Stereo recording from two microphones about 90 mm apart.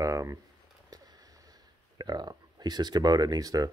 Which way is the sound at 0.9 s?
45° right (ahead or behind).